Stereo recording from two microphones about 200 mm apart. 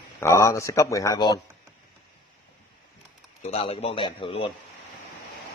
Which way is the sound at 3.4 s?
30° left (ahead or behind).